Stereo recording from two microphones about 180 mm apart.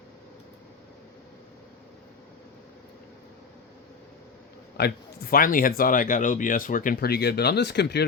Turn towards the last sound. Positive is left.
turn(degrees=70)  # may be behind; listen again after turning